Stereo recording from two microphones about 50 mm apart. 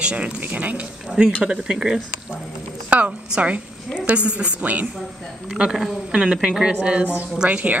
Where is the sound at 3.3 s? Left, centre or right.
Right.